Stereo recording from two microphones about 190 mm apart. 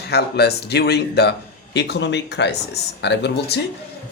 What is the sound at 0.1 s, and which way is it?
Speech, 60° left (ahead or behind).